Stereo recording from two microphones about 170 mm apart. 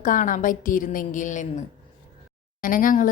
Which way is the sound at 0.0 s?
50° left (ahead or behind).